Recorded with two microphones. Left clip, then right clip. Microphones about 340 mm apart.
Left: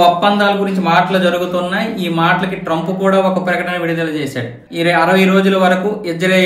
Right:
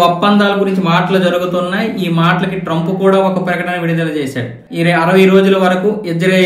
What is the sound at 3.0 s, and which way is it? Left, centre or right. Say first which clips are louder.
A man's voice: right 2 dB; centre.